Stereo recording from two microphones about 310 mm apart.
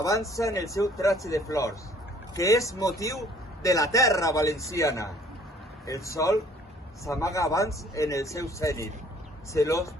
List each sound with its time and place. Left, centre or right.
0.0 s speech: centre